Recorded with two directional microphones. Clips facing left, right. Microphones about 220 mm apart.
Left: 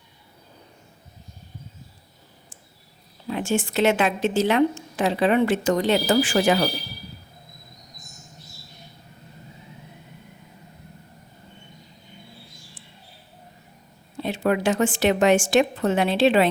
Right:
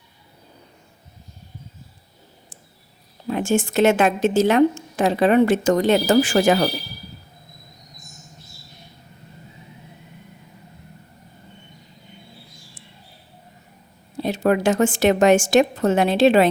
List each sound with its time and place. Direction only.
3.2 s a woman's voice: 45° right (ahead or behind)
14.2 s a woman's voice: 40° right (ahead or behind)